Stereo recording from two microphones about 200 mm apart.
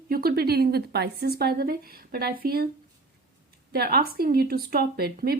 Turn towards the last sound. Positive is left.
turn(degrees=-50)  # may be behind; listen again after turning